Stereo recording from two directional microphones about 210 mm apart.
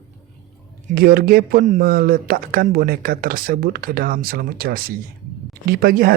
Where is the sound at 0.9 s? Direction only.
45° right (ahead or behind).